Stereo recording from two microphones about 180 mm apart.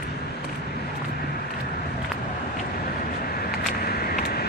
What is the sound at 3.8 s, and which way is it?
Vehicle, 55° left (ahead or behind).